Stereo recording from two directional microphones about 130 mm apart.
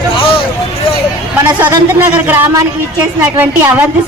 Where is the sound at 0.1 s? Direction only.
40° left (ahead or behind).